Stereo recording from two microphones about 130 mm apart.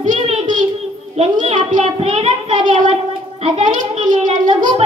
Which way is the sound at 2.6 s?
65° right (ahead or behind).